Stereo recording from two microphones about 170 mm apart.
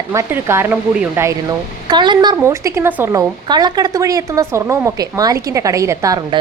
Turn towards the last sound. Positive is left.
turn(degrees=-20)  # may be behind; listen again after turning